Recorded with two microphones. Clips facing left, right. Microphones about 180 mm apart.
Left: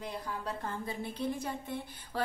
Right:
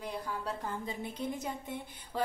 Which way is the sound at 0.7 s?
20° right (ahead or behind).